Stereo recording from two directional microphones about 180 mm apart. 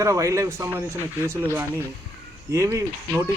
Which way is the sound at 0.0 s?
15° right (ahead or behind).